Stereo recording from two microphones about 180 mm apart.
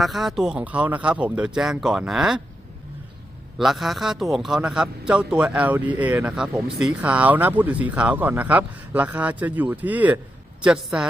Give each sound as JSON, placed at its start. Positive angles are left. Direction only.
{"t": 0.0, "sound": "speech", "side_deg": 0}
{"t": 3.6, "sound": "speech", "side_deg": 0}